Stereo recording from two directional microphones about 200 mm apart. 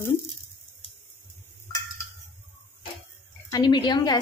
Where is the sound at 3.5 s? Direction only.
20° left (ahead or behind).